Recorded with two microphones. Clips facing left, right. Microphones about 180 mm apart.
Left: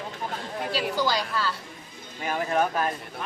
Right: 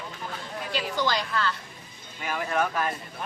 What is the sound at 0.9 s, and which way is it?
Speech, 5° left (ahead or behind).